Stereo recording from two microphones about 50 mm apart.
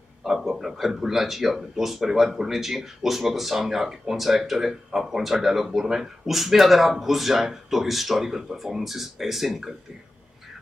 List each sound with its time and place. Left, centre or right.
0.2 s speech: centre